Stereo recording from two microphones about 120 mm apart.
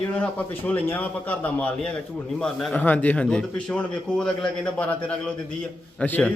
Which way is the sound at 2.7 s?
15° left (ahead or behind).